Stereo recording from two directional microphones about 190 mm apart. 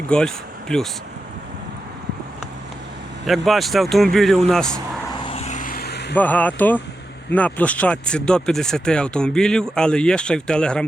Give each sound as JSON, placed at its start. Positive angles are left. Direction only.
{"t": 0.1, "sound": "speech", "side_deg": 5}
{"t": 3.2, "sound": "speech", "side_deg": 0}
{"t": 5.2, "sound": "vehicle", "side_deg": 30}
{"t": 6.1, "sound": "speech", "side_deg": 10}